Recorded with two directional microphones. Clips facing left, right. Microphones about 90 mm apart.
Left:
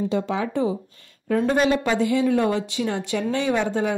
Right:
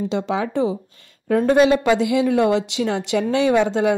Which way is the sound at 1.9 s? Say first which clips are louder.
Right 3 dB; 90° right.